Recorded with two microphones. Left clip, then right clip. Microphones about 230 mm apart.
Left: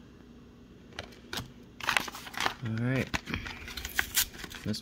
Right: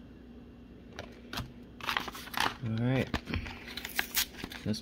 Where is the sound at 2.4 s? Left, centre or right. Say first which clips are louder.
Even; right.